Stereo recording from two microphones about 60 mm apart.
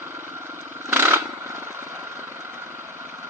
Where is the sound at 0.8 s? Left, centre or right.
Right.